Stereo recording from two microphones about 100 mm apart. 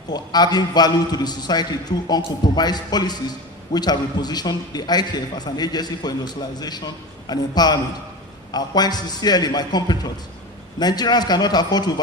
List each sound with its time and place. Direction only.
0.1 s a man's voice: 45° left (ahead or behind)